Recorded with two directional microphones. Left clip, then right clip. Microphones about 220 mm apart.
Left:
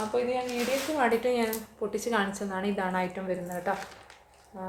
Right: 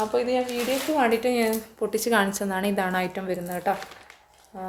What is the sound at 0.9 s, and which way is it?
A woman's voice, 40° right (ahead or behind).